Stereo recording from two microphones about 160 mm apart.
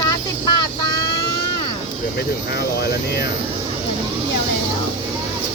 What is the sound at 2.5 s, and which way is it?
Speech, 90° left.